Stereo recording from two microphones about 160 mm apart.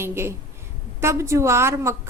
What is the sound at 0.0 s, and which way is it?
A woman's voice, 15° right (ahead or behind).